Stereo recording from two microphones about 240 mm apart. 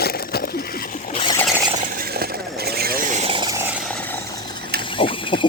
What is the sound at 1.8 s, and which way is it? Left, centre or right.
Vehicle, right.